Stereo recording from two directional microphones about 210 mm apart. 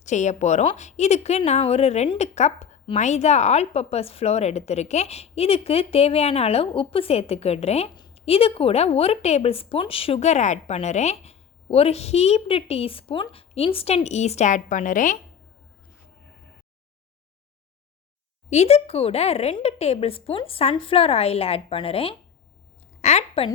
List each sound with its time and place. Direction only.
0.0 s a woman's voice: 35° left (ahead or behind)
18.5 s a woman's voice: 30° left (ahead or behind)